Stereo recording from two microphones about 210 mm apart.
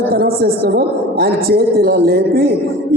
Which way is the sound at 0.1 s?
45° right (ahead or behind).